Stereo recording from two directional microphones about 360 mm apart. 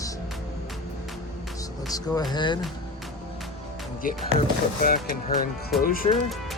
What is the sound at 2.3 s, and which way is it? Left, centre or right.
Speech, centre.